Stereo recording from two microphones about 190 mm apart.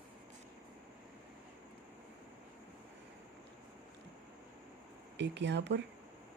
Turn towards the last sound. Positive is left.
turn(degrees=-65)  # may be behind; listen again after turning